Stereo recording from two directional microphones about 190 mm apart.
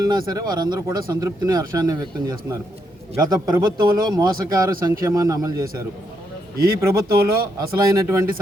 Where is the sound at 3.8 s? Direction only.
25° right (ahead or behind).